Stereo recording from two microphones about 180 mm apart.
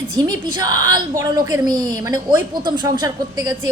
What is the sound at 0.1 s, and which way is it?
A woman's voice, 20° right (ahead or behind).